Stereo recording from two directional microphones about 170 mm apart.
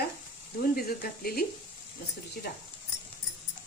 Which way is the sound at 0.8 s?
65° left (ahead or behind).